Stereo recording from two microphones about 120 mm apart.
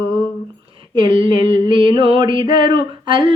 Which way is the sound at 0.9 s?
45° right (ahead or behind).